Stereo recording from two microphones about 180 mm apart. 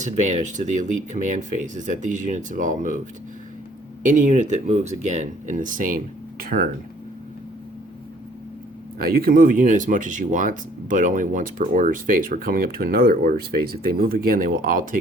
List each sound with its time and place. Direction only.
0.0 s speech: 40° right (ahead or behind)
4.0 s speech: 45° right (ahead or behind)
9.0 s speech: 55° right (ahead or behind)